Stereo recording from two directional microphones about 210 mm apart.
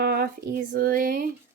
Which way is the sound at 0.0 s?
50° right (ahead or behind).